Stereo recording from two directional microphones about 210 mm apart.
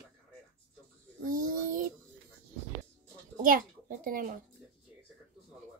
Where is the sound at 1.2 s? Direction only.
40° right (ahead or behind).